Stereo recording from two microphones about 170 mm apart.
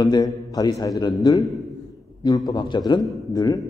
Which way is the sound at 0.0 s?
25° left (ahead or behind).